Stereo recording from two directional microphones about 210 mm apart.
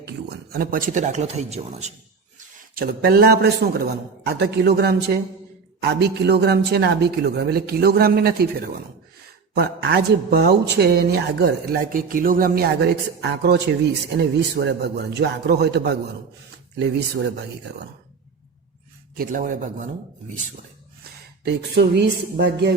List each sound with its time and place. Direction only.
0.0 s speech: 50° right (ahead or behind); by 1.9 s 30° right (ahead or behind)
2.4 s a man's voice: 40° right (ahead or behind)
19.1 s a man's voice: 40° right (ahead or behind)
21.4 s speech: 55° right (ahead or behind)